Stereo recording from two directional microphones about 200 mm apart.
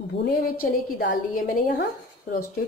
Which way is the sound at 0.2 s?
50° left (ahead or behind).